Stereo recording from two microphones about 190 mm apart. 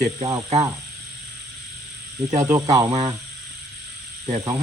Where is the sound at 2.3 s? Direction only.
15° right (ahead or behind).